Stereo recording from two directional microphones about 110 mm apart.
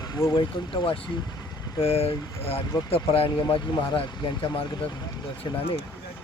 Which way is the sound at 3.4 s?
40° left (ahead or behind).